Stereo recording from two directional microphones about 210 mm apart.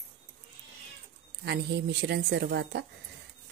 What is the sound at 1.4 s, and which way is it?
Speech, 50° right (ahead or behind).